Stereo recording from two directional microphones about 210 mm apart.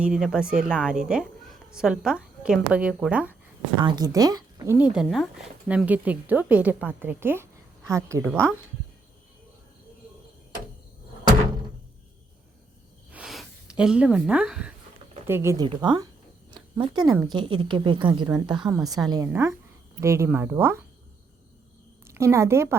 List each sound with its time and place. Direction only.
0.0 s a woman's voice: 5° right (ahead or behind)
3.8 s speech: 20° right (ahead or behind)
13.1 s a sound: 5° right (ahead or behind)
15.3 s speech: 10° right (ahead or behind)
16.5 s a sound: 20° right (ahead or behind)
17.2 s a woman's voice: 20° right (ahead or behind)
22.0 s a woman's voice: 10° right (ahead or behind)